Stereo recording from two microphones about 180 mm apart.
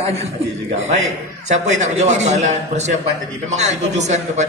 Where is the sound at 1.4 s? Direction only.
40° right (ahead or behind).